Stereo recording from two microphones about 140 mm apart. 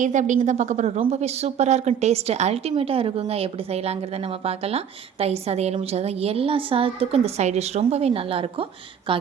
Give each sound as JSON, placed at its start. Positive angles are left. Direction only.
{"t": 0.0, "sound": "a woman's voice", "side_deg": -60}